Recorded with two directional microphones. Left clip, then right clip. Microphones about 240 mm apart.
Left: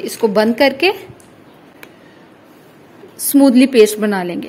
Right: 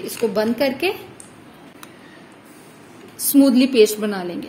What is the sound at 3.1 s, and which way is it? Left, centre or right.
A woman's voice, left.